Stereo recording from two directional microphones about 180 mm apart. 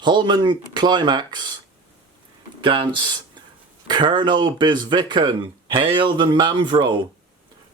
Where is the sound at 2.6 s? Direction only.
25° right (ahead or behind).